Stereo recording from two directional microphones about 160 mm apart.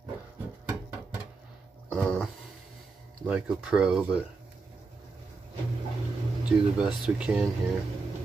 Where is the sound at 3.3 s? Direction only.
5° right (ahead or behind).